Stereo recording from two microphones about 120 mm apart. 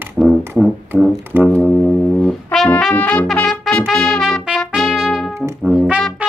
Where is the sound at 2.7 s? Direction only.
10° left (ahead or behind); by 5.3 s 5° right (ahead or behind).